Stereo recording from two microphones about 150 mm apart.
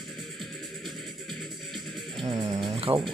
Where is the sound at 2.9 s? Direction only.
25° right (ahead or behind).